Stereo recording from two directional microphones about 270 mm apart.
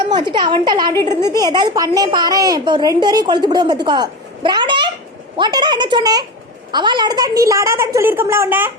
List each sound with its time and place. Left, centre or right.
0.0 s a woman's voice: centre